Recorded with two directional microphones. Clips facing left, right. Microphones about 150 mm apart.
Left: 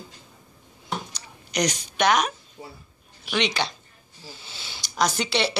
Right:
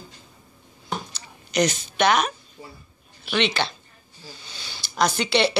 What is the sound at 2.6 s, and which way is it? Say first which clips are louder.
Speech: left 2 dB; 25° left (ahead or behind).